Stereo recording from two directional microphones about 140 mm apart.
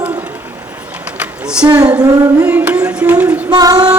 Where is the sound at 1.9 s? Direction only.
25° right (ahead or behind).